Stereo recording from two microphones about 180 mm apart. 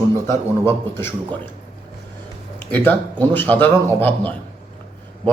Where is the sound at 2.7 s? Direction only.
10° left (ahead or behind).